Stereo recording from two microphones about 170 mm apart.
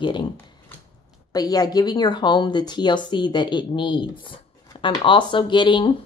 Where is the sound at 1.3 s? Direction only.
20° left (ahead or behind).